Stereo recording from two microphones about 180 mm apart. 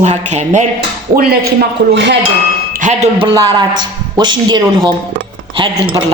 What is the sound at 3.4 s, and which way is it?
A man's voice, 25° right (ahead or behind).